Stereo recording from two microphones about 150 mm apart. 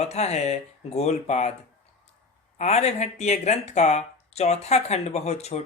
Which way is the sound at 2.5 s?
45° left (ahead or behind).